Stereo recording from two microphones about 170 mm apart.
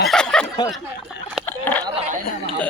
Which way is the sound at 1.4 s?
10° left (ahead or behind).